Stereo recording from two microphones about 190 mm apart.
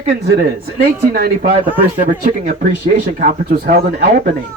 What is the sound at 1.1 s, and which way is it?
Speech, 55° right (ahead or behind).